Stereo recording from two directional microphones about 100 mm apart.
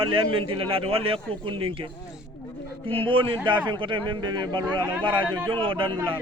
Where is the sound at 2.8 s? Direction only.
65° right (ahead or behind).